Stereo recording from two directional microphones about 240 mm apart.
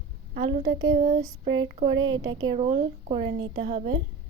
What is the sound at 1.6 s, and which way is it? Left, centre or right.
Speech, centre.